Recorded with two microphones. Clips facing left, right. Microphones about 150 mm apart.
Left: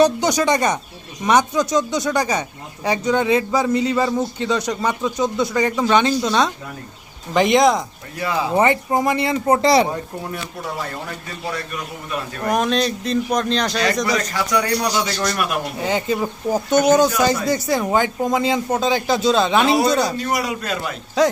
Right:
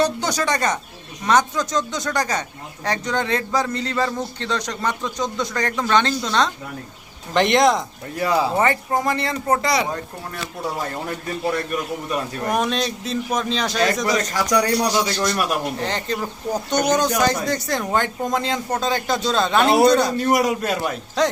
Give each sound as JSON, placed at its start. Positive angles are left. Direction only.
{"t": 0.0, "sound": "a man's voice", "side_deg": 15}
{"t": 7.3, "sound": "speech", "side_deg": 0}
{"t": 8.2, "sound": "speech", "side_deg": -40}
{"t": 8.5, "sound": "a man's voice", "side_deg": 20}
{"t": 9.6, "sound": "speech", "side_deg": 30}
{"t": 12.5, "sound": "speech", "side_deg": 0}
{"t": 15.0, "sound": "speech", "side_deg": -20}
{"t": 15.8, "sound": "speech", "side_deg": 5}
{"t": 20.1, "sound": "a man's voice", "side_deg": -45}
{"t": 21.2, "sound": "speech", "side_deg": 5}